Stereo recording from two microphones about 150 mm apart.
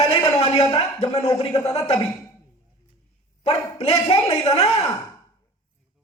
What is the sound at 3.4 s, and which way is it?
Speech, 40° left (ahead or behind).